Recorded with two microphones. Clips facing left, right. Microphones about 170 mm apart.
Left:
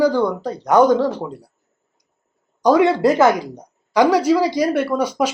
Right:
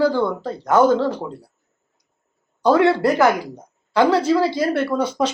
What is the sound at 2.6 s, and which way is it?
Speech, 15° left (ahead or behind).